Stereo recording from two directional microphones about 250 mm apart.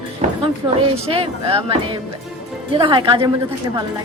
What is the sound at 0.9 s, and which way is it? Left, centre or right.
A woman's voice, right.